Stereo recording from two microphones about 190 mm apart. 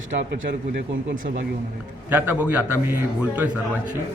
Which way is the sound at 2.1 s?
10° right (ahead or behind).